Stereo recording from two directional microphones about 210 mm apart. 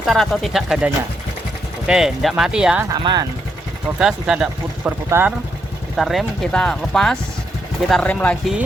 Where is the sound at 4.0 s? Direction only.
5° right (ahead or behind).